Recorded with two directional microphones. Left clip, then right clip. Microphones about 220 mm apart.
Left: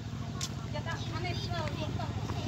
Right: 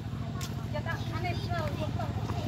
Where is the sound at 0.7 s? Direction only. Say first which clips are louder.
Right 4 dB; 40° right (ahead or behind).